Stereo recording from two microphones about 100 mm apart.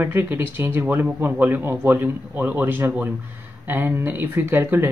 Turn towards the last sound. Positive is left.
turn(degrees=-20)  # may be behind; listen again after turning